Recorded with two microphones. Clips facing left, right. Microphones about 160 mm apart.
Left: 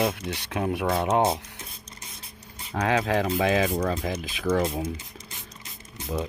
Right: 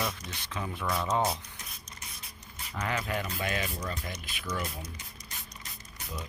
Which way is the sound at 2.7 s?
85° left.